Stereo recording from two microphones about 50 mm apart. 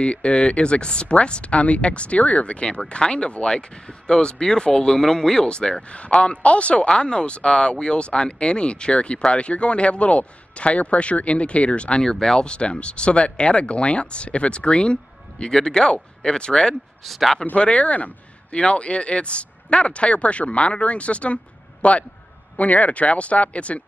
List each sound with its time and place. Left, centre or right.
0.0 s speech: left
12.0 s speech: centre
17.0 s speech: centre
17.6 s speech: left